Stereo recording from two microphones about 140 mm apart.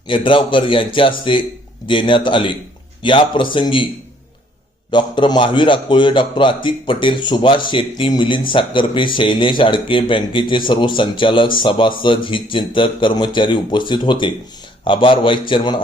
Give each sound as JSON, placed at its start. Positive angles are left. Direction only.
{"t": 0.1, "sound": "a man's voice", "side_deg": 35}
{"t": 4.9, "sound": "a man's voice", "side_deg": 35}